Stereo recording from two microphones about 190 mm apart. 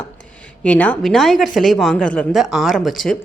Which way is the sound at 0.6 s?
5° left (ahead or behind).